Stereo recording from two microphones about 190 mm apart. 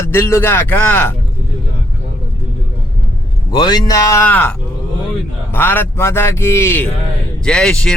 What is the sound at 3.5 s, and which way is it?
A man's voice, 20° left (ahead or behind).